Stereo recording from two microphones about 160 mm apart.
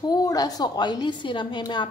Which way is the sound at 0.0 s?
25° left (ahead or behind).